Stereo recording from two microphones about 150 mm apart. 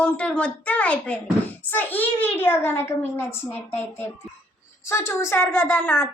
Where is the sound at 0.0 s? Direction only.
10° left (ahead or behind).